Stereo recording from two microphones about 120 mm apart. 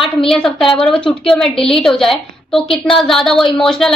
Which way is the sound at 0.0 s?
5° left (ahead or behind).